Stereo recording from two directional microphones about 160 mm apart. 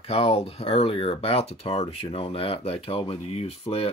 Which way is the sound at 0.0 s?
40° left (ahead or behind).